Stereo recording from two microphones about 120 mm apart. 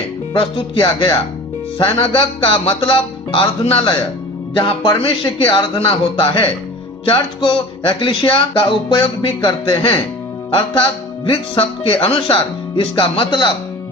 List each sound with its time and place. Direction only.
0.3 s speech: 40° left (ahead or behind)
11.3 s speech: 45° left (ahead or behind)